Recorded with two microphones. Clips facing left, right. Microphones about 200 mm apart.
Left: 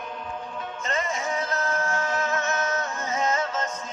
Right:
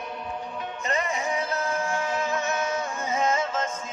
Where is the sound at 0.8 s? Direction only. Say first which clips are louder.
Right 1 dB; 10° right (ahead or behind).